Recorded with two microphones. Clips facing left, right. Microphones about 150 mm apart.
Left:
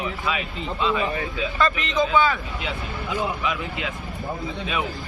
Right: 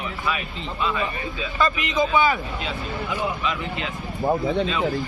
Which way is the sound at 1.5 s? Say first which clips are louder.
Right 1 dB; 5° right (ahead or behind).